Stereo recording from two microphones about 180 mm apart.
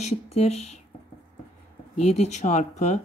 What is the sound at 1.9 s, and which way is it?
Speech, 35° left (ahead or behind).